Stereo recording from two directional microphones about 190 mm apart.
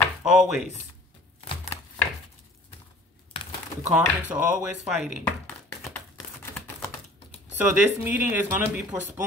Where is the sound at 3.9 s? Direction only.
5° right (ahead or behind).